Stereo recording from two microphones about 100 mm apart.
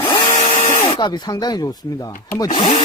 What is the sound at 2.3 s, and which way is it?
Speech, 40° left (ahead or behind).